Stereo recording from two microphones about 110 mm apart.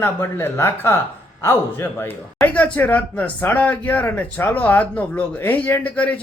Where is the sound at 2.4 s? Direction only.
15° left (ahead or behind).